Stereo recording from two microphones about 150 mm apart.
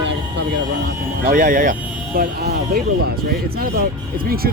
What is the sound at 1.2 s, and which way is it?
Speech, 60° right (ahead or behind).